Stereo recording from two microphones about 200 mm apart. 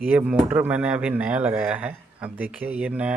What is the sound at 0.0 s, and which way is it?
Speech, 10° right (ahead or behind).